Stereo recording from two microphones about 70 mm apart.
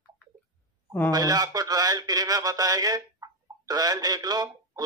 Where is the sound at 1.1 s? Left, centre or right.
Right.